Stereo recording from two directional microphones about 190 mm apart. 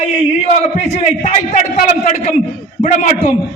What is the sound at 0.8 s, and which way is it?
A man's voice, 35° left (ahead or behind).